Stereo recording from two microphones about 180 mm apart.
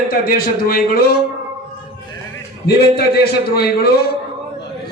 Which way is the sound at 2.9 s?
60° left (ahead or behind).